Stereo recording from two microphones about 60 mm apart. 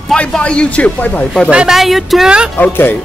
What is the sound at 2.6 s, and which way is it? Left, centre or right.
Speech, left.